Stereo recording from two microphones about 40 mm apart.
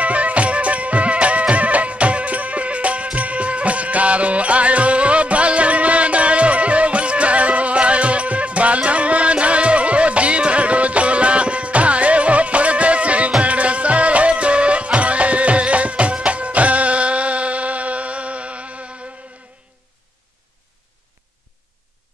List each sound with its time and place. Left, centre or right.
0.0 s music: right